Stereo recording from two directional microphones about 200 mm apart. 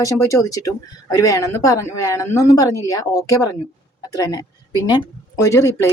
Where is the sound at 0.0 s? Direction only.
15° left (ahead or behind).